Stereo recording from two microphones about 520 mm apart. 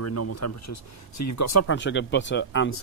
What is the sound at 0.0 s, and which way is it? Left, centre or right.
Speech, left.